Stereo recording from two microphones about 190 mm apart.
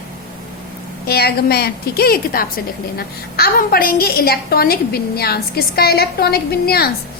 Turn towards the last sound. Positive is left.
turn(degrees=55)  # may be behind; listen again after turning